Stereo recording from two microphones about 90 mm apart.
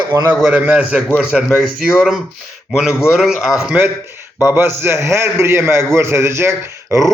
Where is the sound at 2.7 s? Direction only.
5° right (ahead or behind).